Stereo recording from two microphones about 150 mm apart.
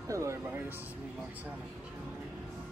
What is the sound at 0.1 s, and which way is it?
Speech, 20° right (ahead or behind).